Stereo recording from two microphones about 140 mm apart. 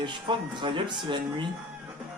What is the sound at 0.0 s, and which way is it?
Speech, 35° right (ahead or behind).